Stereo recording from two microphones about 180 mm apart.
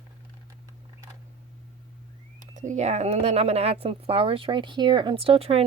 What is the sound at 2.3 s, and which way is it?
Speech, 40° right (ahead or behind).